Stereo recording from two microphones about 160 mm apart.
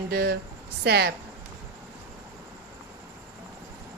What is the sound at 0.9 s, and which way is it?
Speech, 90° right.